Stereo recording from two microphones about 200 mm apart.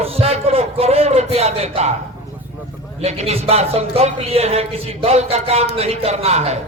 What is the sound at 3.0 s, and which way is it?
Speech, 35° right (ahead or behind).